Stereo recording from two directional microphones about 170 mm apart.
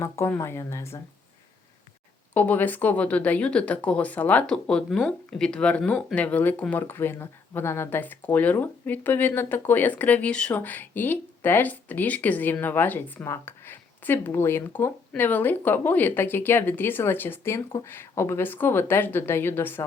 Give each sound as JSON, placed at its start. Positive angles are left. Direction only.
{"t": 0.0, "sound": "speech", "side_deg": 15}
{"t": 2.3, "sound": "speech", "side_deg": 10}